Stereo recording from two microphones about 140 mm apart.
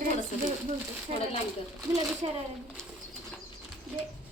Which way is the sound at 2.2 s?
45° right (ahead or behind).